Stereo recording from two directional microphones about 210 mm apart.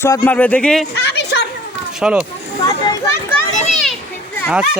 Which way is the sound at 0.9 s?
55° left (ahead or behind).